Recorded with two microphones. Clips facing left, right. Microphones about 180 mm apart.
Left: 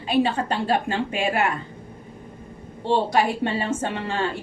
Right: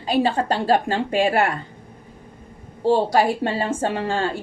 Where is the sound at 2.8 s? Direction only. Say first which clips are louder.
Right 3 dB; 40° right (ahead or behind).